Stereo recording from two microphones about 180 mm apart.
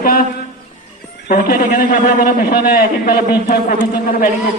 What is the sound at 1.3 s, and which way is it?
A man's voice, 50° left (ahead or behind).